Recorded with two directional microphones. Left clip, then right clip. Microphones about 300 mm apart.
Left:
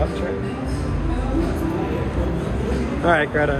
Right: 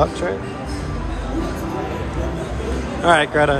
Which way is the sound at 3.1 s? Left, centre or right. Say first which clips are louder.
Right 4 dB; centre.